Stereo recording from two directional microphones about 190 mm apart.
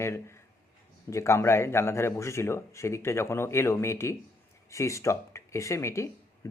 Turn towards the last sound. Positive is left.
turn(degrees=15)  # may be behind; listen again after turning